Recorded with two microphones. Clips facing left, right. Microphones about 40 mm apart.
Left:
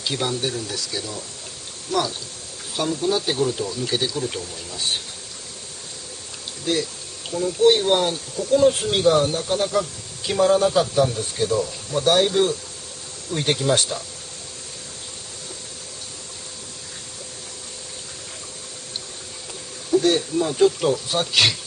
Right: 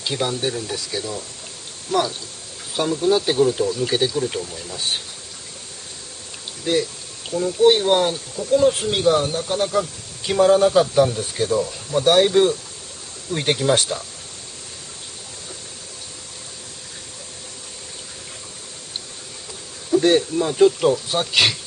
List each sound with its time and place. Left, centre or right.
0.1 s speech: centre
6.6 s speech: centre
20.0 s speech: right
20.3 s speech: centre